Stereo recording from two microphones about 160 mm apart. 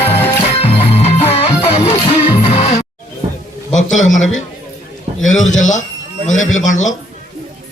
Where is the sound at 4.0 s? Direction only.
50° left (ahead or behind).